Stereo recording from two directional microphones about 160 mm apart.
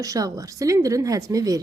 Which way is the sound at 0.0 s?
20° right (ahead or behind).